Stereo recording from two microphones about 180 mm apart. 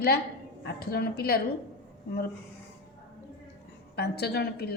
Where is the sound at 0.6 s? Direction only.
60° left (ahead or behind).